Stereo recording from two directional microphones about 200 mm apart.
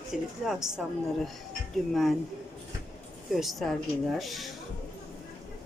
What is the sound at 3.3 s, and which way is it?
A woman's voice, centre (ahead or behind).